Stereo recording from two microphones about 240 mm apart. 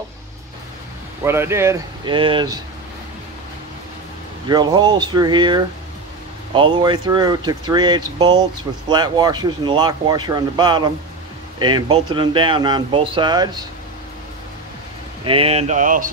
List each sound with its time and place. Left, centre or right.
1.2 s speech: centre
4.5 s speech: centre
15.2 s speech: right